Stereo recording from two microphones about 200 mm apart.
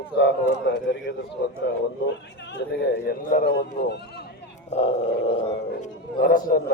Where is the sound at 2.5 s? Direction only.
50° left (ahead or behind).